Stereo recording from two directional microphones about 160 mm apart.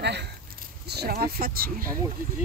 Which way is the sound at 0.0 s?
90° right.